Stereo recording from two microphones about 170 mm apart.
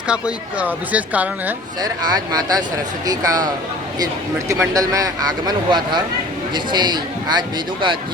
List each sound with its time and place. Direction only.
0.1 s speech: 5° right (ahead or behind)
1.8 s speech: 25° right (ahead or behind)